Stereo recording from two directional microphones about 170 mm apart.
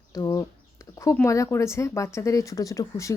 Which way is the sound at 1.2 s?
20° left (ahead or behind).